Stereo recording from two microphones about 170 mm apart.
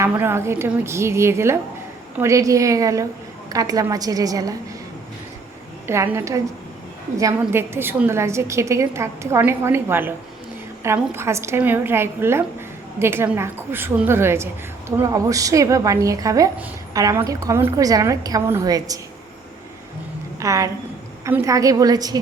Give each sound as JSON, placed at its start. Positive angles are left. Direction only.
{"t": 0.0, "sound": "a woman's voice", "side_deg": -15}
{"t": 5.9, "sound": "a woman's voice", "side_deg": -15}
{"t": 20.4, "sound": "a woman's voice", "side_deg": -20}